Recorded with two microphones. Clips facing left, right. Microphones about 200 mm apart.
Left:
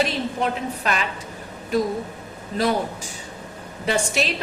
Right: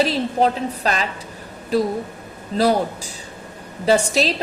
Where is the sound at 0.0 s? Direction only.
35° right (ahead or behind).